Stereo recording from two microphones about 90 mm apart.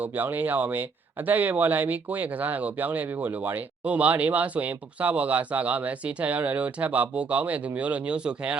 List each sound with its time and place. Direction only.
0.2 s speech: 20° right (ahead or behind)